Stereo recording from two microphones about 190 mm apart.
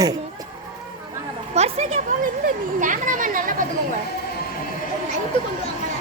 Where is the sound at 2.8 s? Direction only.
45° right (ahead or behind).